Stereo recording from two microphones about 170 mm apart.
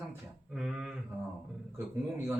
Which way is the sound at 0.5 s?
Centre (ahead or behind).